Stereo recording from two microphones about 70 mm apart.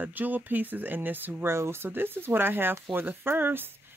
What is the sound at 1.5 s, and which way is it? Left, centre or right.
Speech, right.